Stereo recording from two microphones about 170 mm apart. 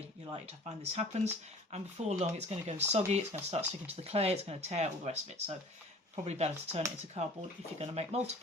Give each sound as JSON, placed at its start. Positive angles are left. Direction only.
{"t": 0.3, "sound": "speech", "side_deg": -40}